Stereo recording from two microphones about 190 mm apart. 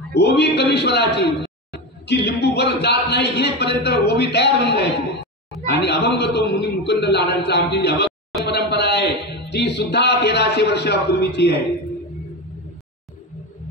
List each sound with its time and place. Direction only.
0.1 s speech: 60° left (ahead or behind)